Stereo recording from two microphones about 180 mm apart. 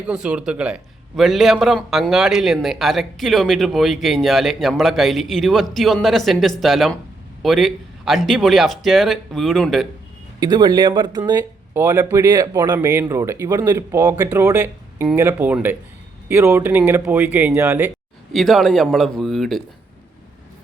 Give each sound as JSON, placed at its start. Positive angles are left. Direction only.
{"t": 0.1, "sound": "a man's voice", "side_deg": -5}
{"t": 10.4, "sound": "speech", "side_deg": -25}
{"t": 18.3, "sound": "a man's voice", "side_deg": 0}